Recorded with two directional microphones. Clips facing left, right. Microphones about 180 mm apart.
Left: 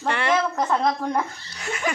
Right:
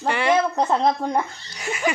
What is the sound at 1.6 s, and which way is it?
Laughter, 10° right (ahead or behind).